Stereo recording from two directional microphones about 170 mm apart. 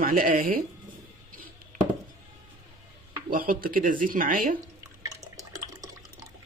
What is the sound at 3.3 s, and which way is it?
Speech, 55° right (ahead or behind).